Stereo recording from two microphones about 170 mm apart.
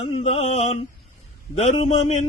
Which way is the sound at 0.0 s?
40° left (ahead or behind).